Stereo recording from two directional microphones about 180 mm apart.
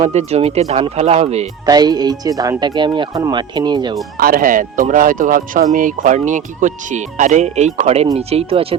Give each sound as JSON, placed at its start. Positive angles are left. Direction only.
{"t": 0.0, "sound": "speech", "side_deg": -35}
{"t": 1.6, "sound": "speech", "side_deg": -20}
{"t": 4.2, "sound": "speech", "side_deg": -50}